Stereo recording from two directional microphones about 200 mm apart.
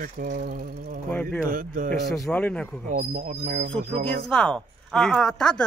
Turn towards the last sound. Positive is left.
turn(degrees=5)  # may be behind; listen again after turning